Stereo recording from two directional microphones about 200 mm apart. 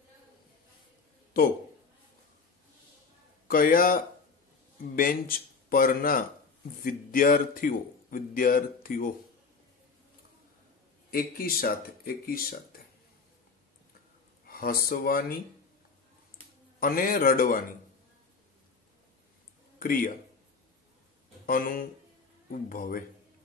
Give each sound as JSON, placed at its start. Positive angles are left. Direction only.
{"t": 3.4, "sound": "a man's voice", "side_deg": 45}
{"t": 11.1, "sound": "a man's voice", "side_deg": 45}
{"t": 14.5, "sound": "a man's voice", "side_deg": 50}
{"t": 16.8, "sound": "a man's voice", "side_deg": 45}
{"t": 19.8, "sound": "speech", "side_deg": 45}
{"t": 21.5, "sound": "a man's voice", "side_deg": 45}